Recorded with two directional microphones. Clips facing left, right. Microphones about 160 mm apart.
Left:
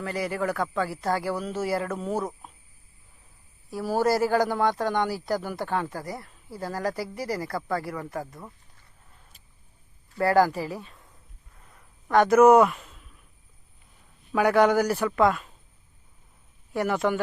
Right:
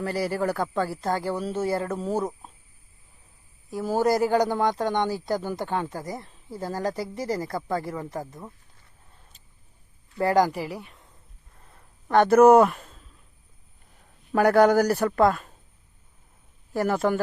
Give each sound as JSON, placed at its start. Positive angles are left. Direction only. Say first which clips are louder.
{"t": 0.3, "sound": "speech", "louder": "right 1 dB", "side_deg": -30}
{"t": 3.7, "sound": "speech", "louder": "right 1 dB", "side_deg": -20}
{"t": 10.2, "sound": "speech", "louder": "even", "side_deg": -15}
{"t": 11.6, "sound": "a sound", "louder": "right 1 dB", "side_deg": -30}
{"t": 14.3, "sound": "a man's voice", "louder": "right 2 dB", "side_deg": -40}
{"t": 16.7, "sound": "a man's voice", "louder": "right 1 dB", "side_deg": -35}